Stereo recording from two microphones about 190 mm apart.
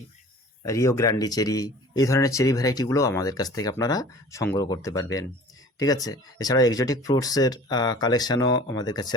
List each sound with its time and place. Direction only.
0.6 s a man's voice: 15° left (ahead or behind)